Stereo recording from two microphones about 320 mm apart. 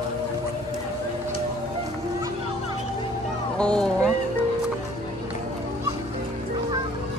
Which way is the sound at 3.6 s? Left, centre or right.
Centre.